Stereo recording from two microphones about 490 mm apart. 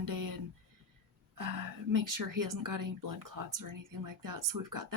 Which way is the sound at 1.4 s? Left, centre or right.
Right.